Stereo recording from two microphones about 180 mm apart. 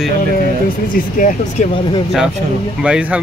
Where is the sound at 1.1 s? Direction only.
45° left (ahead or behind).